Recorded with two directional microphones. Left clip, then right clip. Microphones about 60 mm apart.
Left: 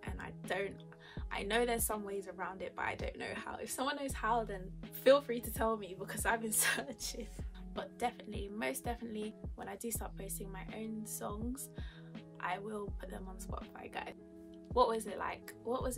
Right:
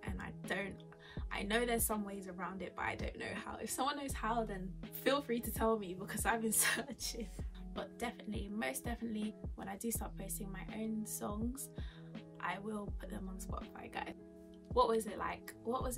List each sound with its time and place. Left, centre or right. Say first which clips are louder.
0.0 s music: left 1 dB; left
2.0 s a woman's voice: left 4 dB; left
7.8 s a woman's voice: left 5 dB; left